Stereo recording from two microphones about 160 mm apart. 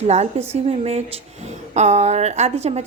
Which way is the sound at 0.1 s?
40° right (ahead or behind).